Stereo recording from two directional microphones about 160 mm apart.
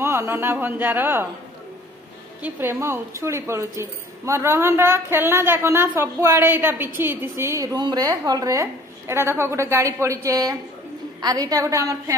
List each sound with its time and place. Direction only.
0.0 s a woman's voice: 20° right (ahead or behind)
2.4 s a woman's voice: 15° right (ahead or behind)